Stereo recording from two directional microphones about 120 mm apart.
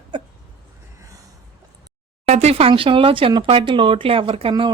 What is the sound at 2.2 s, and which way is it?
Speech, 60° right (ahead or behind).